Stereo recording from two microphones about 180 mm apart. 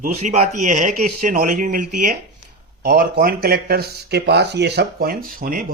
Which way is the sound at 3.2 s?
55° right (ahead or behind).